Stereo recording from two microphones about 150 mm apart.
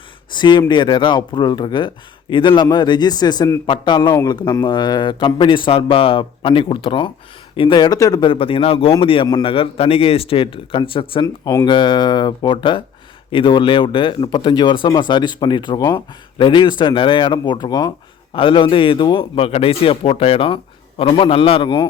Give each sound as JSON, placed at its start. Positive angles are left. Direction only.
{"t": 0.3, "sound": "a man's voice", "side_deg": 30}